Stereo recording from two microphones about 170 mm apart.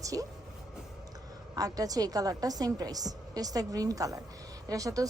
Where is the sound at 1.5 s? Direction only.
20° right (ahead or behind).